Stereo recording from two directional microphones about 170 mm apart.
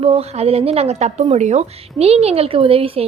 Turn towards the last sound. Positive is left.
turn(degrees=-35)  # may be behind; listen again after turning